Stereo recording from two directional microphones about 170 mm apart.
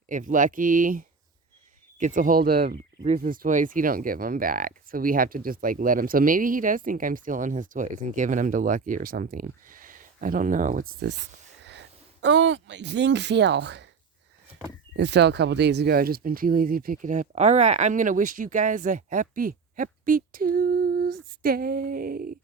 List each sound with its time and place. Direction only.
0.1 s speech: 50° right (ahead or behind)
2.6 s speech: 40° right (ahead or behind)
3.2 s speech: 55° right (ahead or behind)
12.2 s speech: 90° right
14.9 s speech: 90° right; by 22.4 s 55° right (ahead or behind)